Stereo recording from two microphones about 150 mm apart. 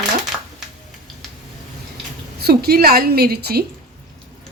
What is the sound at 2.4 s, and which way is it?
A woman's voice, 90° right.